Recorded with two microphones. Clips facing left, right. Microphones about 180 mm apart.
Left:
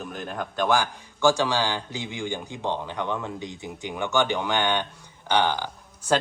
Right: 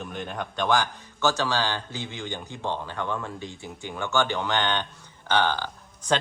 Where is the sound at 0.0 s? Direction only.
Centre (ahead or behind).